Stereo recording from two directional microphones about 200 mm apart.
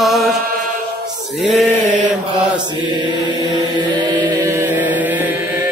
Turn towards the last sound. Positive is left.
turn(degrees=-10)  # may be behind; listen again after turning